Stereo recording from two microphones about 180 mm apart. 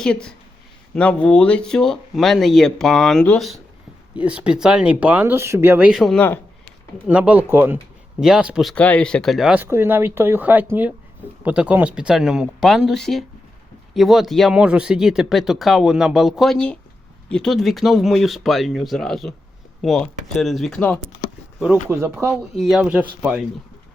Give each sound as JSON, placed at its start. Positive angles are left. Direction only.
{"t": 0.0, "sound": "speech", "side_deg": 5}
{"t": 5.9, "sound": "speech", "side_deg": 0}
{"t": 21.8, "sound": "speech", "side_deg": -10}
{"t": 22.5, "sound": "speech", "side_deg": 0}